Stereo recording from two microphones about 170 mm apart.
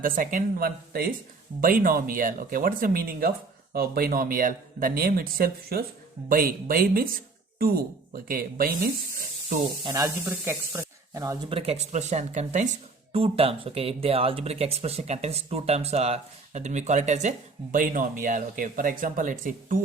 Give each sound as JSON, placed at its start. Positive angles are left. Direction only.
{"t": 0.0, "sound": "speech", "side_deg": -50}
{"t": 9.8, "sound": "speech", "side_deg": -20}